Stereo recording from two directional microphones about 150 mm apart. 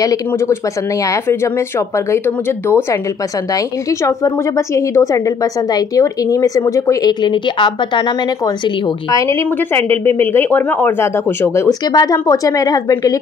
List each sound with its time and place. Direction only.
0.0 s a woman's voice: 25° left (ahead or behind)
2.2 s speech: 15° left (ahead or behind)
4.0 s a woman's voice: 20° left (ahead or behind)
9.1 s a woman's voice: 20° left (ahead or behind)